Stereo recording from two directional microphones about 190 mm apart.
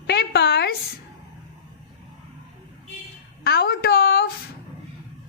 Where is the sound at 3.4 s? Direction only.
55° left (ahead or behind).